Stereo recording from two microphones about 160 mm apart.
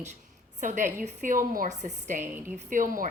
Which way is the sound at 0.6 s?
50° right (ahead or behind).